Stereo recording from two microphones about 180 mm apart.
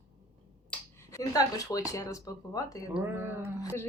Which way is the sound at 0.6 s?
15° left (ahead or behind).